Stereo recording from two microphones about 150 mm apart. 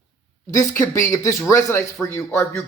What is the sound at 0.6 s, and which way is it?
Speech, 20° left (ahead or behind).